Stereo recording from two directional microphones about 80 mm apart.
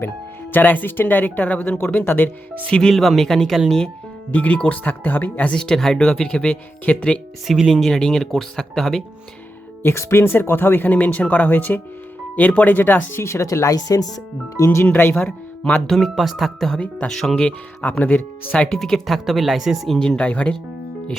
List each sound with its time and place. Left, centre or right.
0.5 s speech: left
2.6 s speech: centre
2.9 s speech: centre
7.4 s speech: centre
9.8 s speech: left
14.5 s speech: left
15.9 s speech: centre
17.8 s speech: centre
18.8 s speech: centre
20.0 s speech: centre